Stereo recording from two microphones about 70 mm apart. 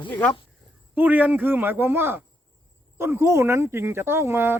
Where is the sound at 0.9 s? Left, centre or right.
Right.